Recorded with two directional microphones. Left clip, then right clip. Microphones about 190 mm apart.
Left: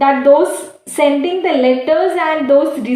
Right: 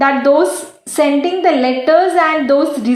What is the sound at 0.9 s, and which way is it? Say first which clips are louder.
A woman's voice: even; 30° right (ahead or behind).